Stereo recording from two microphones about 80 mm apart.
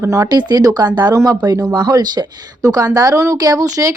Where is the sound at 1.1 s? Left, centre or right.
Right.